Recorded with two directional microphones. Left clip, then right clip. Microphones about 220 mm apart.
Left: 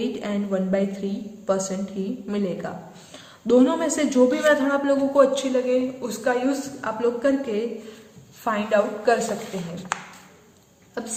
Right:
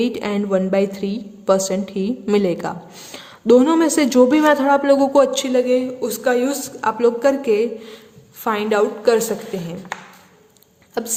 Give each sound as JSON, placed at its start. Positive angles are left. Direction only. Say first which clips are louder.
{"t": 0.0, "sound": "a woman's voice", "louder": "right 6 dB", "side_deg": -45}
{"t": 11.0, "sound": "a woman's voice", "louder": "right 7 dB", "side_deg": -50}